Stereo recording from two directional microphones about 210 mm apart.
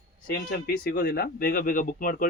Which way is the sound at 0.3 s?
45° left (ahead or behind).